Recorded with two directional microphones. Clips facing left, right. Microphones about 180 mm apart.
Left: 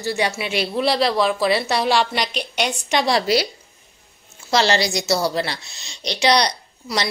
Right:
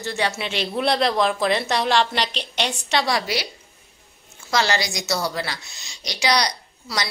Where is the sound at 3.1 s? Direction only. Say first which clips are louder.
Left 5 dB; 40° left (ahead or behind).